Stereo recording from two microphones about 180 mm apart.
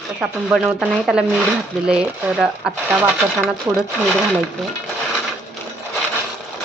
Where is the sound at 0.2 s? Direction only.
5° right (ahead or behind).